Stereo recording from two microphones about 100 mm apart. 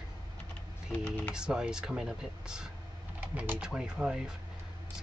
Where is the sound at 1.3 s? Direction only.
5° right (ahead or behind).